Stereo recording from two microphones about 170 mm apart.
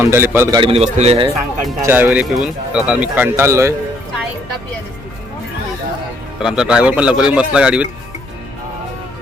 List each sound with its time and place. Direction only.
0.0 s speech: 15° right (ahead or behind)
0.6 s speech: 35° right (ahead or behind)
1.8 s speech: 10° right (ahead or behind)
6.4 s speech: 5° right (ahead or behind)